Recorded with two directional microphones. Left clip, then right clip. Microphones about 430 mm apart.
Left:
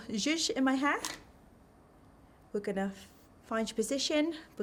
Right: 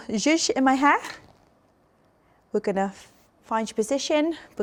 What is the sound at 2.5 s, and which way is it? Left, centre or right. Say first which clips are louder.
Speech: right 10 dB; right.